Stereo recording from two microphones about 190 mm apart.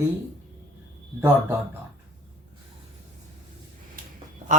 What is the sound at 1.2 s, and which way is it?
Speech, 10° right (ahead or behind).